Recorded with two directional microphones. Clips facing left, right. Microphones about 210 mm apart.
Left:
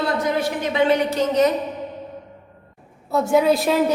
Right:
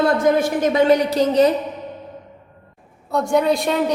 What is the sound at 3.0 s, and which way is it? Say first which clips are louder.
Speech: left 1 dB; 5° left (ahead or behind).